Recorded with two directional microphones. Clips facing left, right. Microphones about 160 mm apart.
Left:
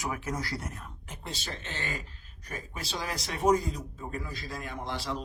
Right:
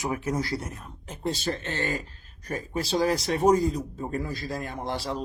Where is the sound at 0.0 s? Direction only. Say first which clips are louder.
Right 6 dB; 25° right (ahead or behind).